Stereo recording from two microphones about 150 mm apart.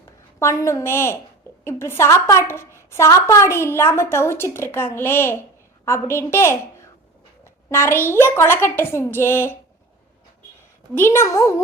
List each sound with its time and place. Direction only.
0.3 s a woman's voice: 20° left (ahead or behind)
10.9 s a woman's voice: 15° left (ahead or behind)